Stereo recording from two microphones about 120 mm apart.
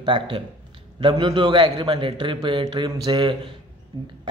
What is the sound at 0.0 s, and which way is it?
A man's voice, 45° right (ahead or behind).